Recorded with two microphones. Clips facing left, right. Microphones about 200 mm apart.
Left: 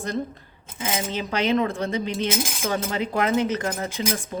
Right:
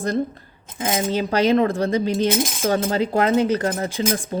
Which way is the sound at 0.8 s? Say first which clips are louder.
Right 6 dB; 40° right (ahead or behind).